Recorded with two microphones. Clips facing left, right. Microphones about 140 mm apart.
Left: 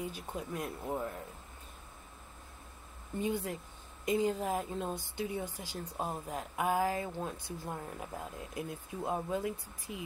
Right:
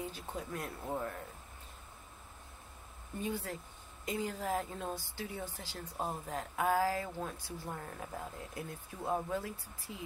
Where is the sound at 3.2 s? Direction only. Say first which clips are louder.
Left 4 dB; 20° left (ahead or behind).